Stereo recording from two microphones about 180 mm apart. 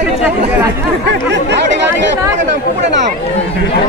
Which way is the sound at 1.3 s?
75° right (ahead or behind).